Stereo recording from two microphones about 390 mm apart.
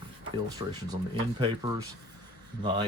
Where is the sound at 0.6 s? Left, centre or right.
Centre.